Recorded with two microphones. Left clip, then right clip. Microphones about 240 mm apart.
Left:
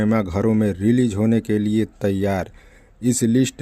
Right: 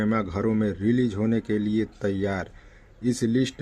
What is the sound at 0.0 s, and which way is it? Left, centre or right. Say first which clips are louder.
Speech: left 5 dB; left.